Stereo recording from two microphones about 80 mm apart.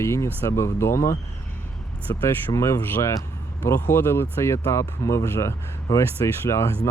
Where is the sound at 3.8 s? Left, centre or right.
Left.